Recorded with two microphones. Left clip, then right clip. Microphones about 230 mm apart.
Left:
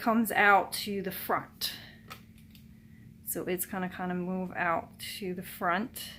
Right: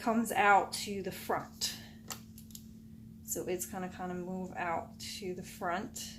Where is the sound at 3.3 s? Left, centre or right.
Left.